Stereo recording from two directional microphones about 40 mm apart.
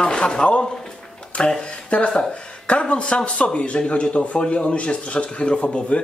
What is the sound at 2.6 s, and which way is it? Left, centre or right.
Speech, left.